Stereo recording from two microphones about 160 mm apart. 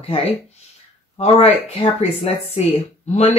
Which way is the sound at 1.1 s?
40° left (ahead or behind).